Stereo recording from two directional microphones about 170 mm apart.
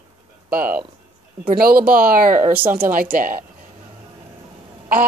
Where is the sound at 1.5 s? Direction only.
60° right (ahead or behind).